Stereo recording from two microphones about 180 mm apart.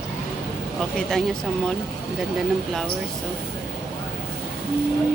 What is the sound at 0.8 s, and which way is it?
Speech, 5° left (ahead or behind).